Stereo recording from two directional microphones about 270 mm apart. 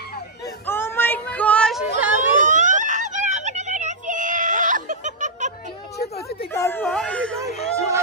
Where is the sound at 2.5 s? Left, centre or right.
Right.